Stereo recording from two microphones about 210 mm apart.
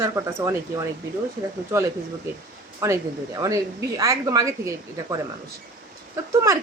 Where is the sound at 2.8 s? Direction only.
15° right (ahead or behind).